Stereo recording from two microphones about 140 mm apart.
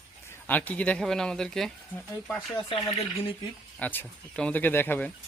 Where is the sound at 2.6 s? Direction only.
35° left (ahead or behind).